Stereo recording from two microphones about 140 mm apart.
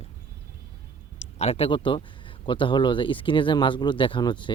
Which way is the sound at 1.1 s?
45° left (ahead or behind).